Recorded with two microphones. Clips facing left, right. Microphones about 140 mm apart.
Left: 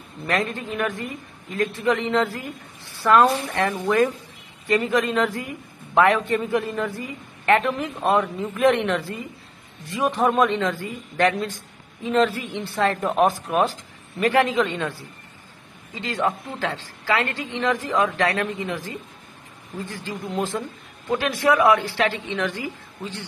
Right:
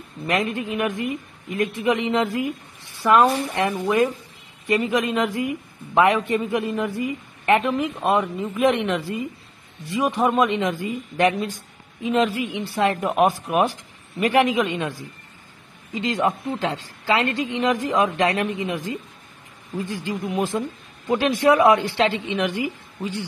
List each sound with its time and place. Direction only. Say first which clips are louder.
0.3 s a woman's voice: right 2 dB; 15° right (ahead or behind)